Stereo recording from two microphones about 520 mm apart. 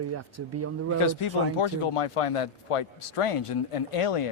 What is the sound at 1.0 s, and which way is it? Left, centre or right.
A man's voice, left.